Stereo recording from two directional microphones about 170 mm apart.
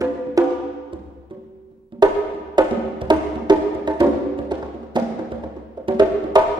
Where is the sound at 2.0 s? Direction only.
25° right (ahead or behind).